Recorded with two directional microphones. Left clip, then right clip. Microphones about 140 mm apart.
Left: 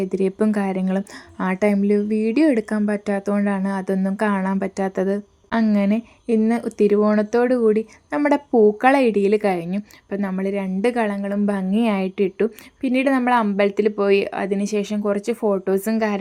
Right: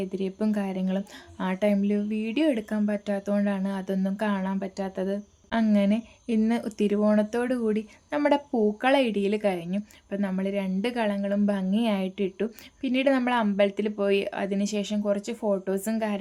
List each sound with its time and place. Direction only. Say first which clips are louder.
0.1 s a woman's voice: left 9 dB; 45° left (ahead or behind)
5.7 s speech: left 4 dB; 25° left (ahead or behind)